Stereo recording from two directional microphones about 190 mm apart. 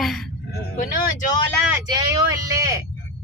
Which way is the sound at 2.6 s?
20° right (ahead or behind).